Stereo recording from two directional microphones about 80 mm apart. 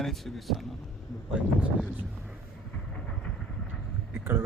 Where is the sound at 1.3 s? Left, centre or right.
Centre.